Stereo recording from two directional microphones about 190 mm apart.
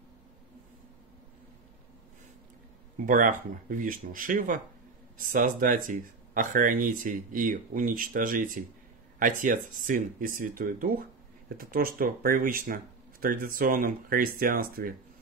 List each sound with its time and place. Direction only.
3.1 s speech: 45° right (ahead or behind)